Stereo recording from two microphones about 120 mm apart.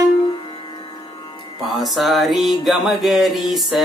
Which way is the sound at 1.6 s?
Centre (ahead or behind).